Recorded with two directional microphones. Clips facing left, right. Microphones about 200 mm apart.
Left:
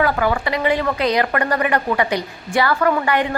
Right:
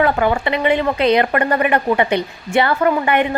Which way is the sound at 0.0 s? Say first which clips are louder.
Right 3 dB; 25° right (ahead or behind).